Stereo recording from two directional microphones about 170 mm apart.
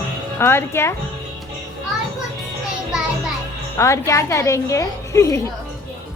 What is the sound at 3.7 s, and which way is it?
A woman's voice, 15° left (ahead or behind).